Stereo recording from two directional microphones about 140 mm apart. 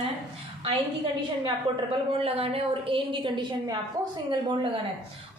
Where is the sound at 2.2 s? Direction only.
45° right (ahead or behind).